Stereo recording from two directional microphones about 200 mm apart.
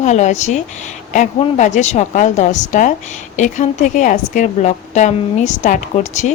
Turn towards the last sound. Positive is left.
turn(degrees=35)  # may be behind; listen again after turning